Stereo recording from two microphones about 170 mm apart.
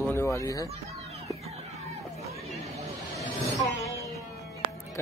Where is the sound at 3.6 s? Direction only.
20° left (ahead or behind).